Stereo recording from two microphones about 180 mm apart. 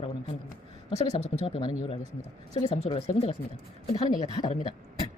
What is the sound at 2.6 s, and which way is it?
Speech, 35° left (ahead or behind).